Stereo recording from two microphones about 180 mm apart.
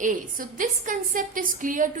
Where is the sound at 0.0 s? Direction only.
45° right (ahead or behind).